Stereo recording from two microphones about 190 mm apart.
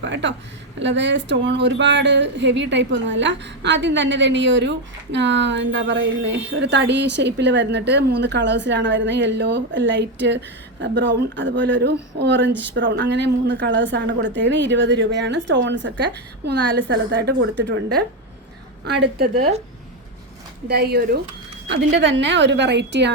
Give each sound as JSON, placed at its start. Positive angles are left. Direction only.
{"t": 0.0, "sound": "a woman's voice", "side_deg": -70}
{"t": 19.3, "sound": "speech", "side_deg": -35}
{"t": 20.7, "sound": "a woman's voice", "side_deg": -55}
{"t": 21.7, "sound": "a woman's voice", "side_deg": -65}